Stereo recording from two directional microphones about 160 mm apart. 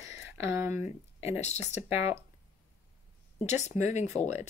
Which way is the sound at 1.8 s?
15° right (ahead or behind).